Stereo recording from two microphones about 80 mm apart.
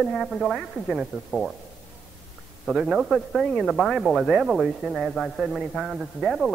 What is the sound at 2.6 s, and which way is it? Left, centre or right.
A man's voice, centre.